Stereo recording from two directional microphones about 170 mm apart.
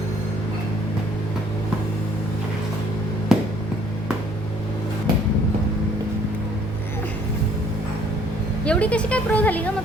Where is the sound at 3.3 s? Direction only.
5° right (ahead or behind).